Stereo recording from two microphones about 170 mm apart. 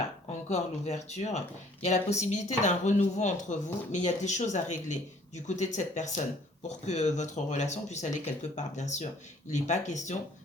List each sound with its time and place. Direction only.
0.3 s speech: 40° left (ahead or behind)